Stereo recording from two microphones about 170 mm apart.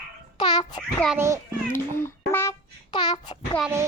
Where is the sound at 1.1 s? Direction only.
15° right (ahead or behind).